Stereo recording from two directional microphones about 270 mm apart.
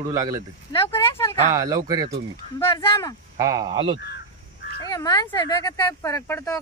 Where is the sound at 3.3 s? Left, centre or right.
Centre.